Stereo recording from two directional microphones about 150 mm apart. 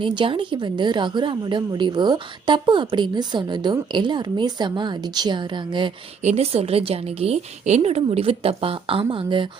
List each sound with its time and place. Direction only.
0.0 s a woman's voice: 35° right (ahead or behind)
6.2 s a woman's voice: 45° right (ahead or behind)